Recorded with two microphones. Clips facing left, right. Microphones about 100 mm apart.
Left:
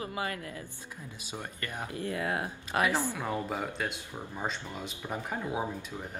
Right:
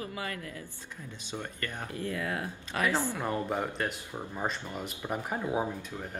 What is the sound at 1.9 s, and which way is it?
Speech, 25° left (ahead or behind).